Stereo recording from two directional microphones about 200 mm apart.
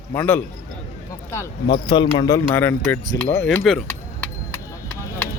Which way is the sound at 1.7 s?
20° left (ahead or behind).